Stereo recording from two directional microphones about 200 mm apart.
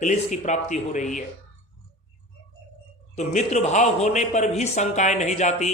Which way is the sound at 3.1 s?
35° left (ahead or behind).